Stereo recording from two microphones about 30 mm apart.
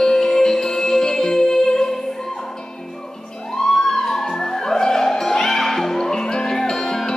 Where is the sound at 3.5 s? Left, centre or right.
Centre.